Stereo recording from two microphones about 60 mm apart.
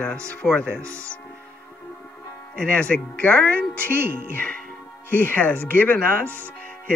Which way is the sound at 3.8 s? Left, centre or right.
Right.